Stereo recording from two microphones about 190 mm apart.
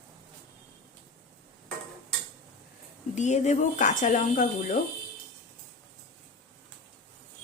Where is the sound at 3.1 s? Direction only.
40° left (ahead or behind).